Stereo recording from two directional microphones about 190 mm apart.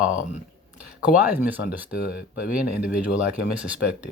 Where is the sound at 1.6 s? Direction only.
65° left (ahead or behind).